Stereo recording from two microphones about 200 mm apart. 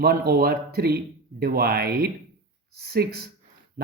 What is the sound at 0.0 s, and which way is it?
Speech, 50° right (ahead or behind).